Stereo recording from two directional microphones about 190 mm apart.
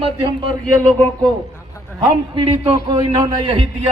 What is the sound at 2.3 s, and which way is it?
A man's voice, 30° right (ahead or behind).